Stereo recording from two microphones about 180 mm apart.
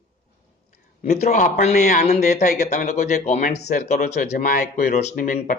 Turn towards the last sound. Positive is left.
turn(degrees=45)  # may be behind; listen again after turning